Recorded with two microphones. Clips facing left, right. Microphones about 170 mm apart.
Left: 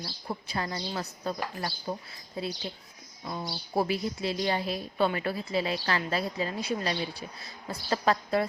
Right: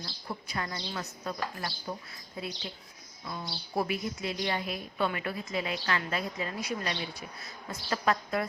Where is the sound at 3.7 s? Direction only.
30° left (ahead or behind).